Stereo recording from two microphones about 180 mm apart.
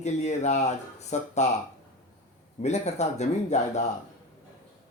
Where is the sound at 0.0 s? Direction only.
40° left (ahead or behind).